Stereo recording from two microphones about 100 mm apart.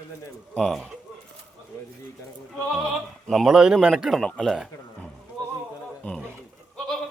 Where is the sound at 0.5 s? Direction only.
5° left (ahead or behind).